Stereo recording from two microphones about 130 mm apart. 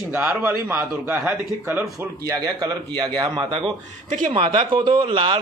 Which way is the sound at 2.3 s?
30° right (ahead or behind).